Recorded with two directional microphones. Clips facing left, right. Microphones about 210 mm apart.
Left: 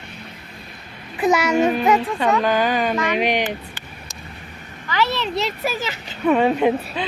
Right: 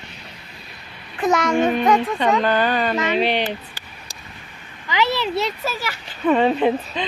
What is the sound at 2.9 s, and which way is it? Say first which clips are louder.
Speech: even; 20° right (ahead or behind).